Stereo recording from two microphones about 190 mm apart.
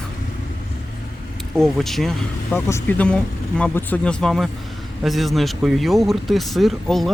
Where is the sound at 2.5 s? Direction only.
15° left (ahead or behind).